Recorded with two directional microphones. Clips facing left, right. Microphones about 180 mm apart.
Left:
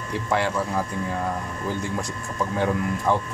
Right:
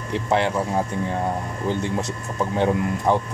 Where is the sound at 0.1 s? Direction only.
20° right (ahead or behind).